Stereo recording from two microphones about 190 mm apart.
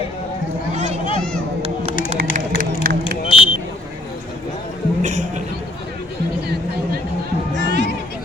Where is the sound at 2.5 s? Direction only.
55° right (ahead or behind).